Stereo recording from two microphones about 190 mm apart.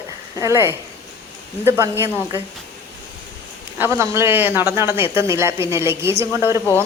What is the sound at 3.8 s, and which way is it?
Speech, 15° right (ahead or behind).